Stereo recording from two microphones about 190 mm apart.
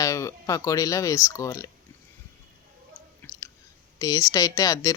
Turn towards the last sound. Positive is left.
turn(degrees=20)  # may be behind; listen again after turning